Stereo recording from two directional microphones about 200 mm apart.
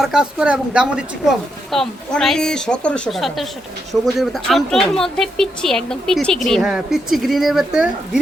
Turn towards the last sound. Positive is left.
turn(degrees=0)  # may be behind; listen again after turning